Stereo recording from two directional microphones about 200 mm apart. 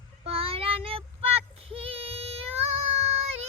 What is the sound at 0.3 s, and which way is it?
Child singing, 30° right (ahead or behind).